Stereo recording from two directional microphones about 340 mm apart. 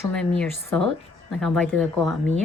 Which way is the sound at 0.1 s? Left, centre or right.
Centre.